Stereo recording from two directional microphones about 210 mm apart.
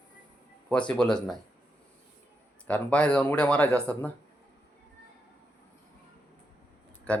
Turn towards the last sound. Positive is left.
turn(degrees=5)  # may be behind; listen again after turning